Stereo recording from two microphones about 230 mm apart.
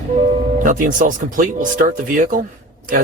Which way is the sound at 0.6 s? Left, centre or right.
Right.